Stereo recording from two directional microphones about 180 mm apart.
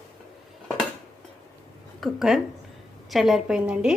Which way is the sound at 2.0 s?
Centre (ahead or behind).